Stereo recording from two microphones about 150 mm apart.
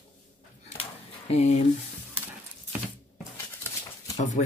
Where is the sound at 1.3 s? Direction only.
45° left (ahead or behind).